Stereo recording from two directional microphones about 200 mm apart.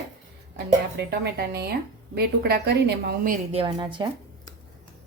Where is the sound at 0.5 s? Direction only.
55° right (ahead or behind).